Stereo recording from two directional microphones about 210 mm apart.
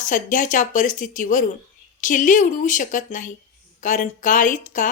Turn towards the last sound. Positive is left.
turn(degrees=40)  # may be behind; listen again after turning